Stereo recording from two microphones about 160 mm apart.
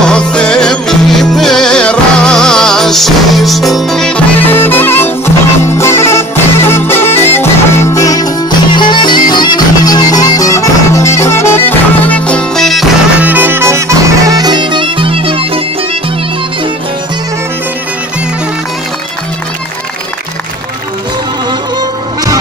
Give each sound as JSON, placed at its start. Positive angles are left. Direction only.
{"t": 0.0, "sound": "music", "side_deg": 5}
{"t": 13.2, "sound": "bagpipes", "side_deg": -10}